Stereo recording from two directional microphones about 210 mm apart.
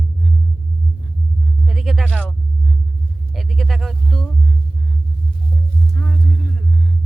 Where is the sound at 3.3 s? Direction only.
Centre (ahead or behind).